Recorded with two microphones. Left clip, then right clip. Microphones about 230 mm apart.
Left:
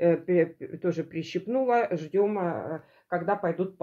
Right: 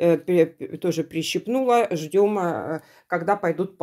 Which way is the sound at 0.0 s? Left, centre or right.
Right.